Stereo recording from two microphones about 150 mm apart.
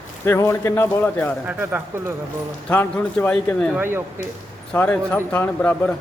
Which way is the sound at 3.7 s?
15° right (ahead or behind).